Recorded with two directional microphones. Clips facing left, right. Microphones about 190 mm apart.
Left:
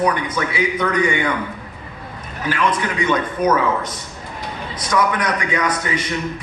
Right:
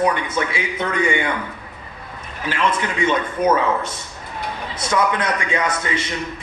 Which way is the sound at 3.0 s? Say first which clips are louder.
Even; 25° right (ahead or behind).